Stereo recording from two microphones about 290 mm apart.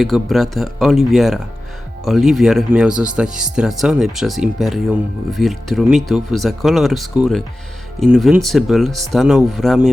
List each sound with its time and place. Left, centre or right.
0.0 s speech: centre